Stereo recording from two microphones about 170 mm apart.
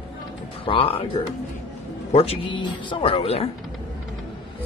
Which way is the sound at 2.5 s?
30° left (ahead or behind).